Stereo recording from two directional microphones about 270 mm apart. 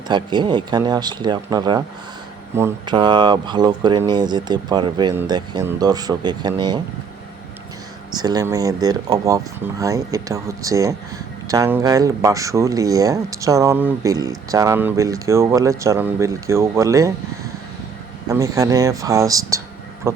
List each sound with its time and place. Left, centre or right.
0.1 s speech: centre
8.1 s speech: centre
18.3 s speech: centre
20.1 s a sound: centre